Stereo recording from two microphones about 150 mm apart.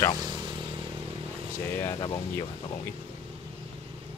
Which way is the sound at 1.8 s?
20° left (ahead or behind).